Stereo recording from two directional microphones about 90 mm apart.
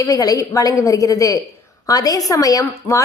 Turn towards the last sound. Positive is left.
turn(degrees=40)  # may be behind; listen again after turning